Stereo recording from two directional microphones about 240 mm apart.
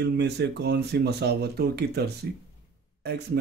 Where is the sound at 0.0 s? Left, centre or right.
Right.